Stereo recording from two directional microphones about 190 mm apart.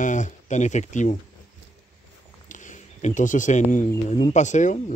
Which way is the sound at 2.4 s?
40° left (ahead or behind).